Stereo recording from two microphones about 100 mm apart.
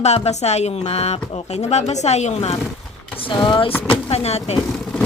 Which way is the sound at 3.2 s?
55° left (ahead or behind).